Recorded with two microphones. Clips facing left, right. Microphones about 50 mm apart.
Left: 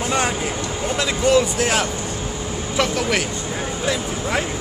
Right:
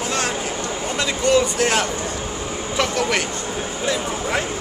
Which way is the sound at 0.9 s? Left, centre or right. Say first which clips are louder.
Left 1 dB; centre.